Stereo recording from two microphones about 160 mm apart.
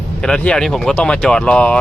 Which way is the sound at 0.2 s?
5° left (ahead or behind).